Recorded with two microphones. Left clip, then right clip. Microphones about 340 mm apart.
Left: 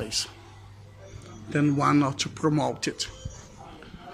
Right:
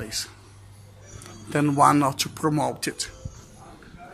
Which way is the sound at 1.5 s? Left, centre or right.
Centre.